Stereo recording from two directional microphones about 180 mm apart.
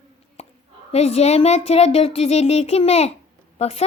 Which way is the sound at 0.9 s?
35° left (ahead or behind).